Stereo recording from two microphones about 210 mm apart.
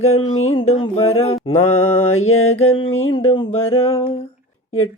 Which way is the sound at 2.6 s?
25° left (ahead or behind).